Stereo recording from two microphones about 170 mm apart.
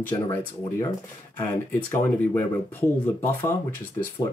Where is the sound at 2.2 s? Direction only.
10° left (ahead or behind).